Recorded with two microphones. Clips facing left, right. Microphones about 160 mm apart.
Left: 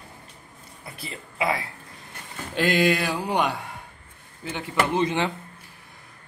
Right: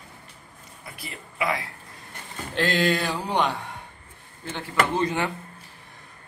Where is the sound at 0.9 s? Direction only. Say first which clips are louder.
Left 1 dB; 25° left (ahead or behind).